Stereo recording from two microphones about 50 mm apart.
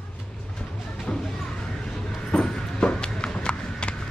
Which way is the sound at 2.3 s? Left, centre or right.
Centre.